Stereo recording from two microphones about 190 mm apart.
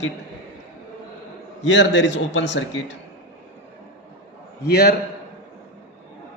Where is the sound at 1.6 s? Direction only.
70° left (ahead or behind).